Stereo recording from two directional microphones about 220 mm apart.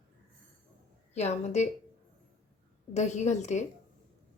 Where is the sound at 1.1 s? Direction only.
30° left (ahead or behind).